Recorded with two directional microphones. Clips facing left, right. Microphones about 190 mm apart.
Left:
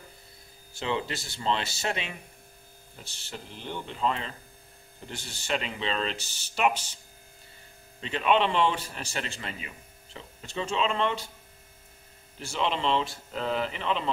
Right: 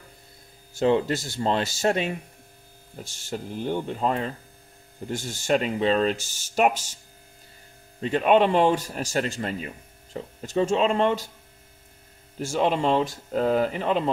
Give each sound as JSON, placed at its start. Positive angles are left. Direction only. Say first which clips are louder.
{"t": 0.7, "sound": "speech", "louder": "right 10 dB", "side_deg": -45}
{"t": 8.0, "sound": "speech", "louder": "right 6 dB", "side_deg": -50}
{"t": 12.4, "sound": "speech", "louder": "right 6 dB", "side_deg": -45}